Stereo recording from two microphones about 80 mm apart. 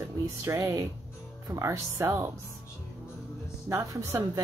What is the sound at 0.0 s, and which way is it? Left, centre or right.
Speech, right.